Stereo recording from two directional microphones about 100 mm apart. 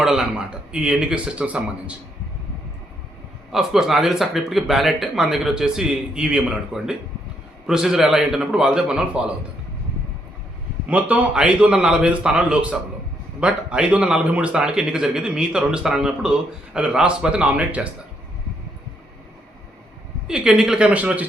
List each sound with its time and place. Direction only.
0.0 s a man's voice: 5° right (ahead or behind)
3.5 s speech: 5° right (ahead or behind)
11.1 s a man's voice: 10° right (ahead or behind)
20.2 s a man's voice: 10° right (ahead or behind)